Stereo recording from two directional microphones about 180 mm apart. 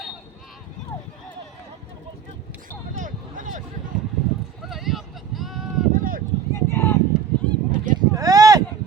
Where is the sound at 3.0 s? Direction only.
45° right (ahead or behind).